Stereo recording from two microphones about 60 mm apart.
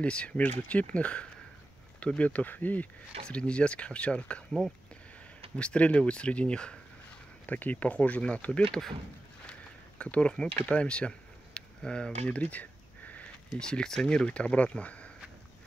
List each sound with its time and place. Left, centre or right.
0.0 s speech: centre
5.6 s speech: centre
7.4 s speech: left
9.5 s a sound: centre
13.6 s speech: centre